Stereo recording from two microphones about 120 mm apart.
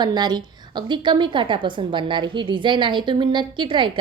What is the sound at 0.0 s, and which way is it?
A woman's voice, 35° right (ahead or behind).